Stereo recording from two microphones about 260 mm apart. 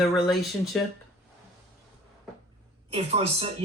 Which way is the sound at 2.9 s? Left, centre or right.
Right.